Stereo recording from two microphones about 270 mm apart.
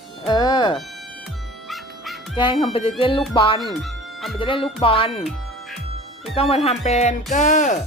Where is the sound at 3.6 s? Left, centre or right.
Centre.